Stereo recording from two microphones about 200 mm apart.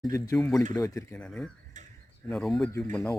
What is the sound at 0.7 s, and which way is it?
Speech, 15° left (ahead or behind).